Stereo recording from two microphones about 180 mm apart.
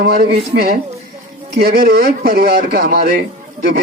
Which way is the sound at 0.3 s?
60° right (ahead or behind).